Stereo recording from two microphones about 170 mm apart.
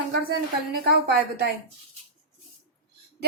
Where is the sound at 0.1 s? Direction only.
65° right (ahead or behind).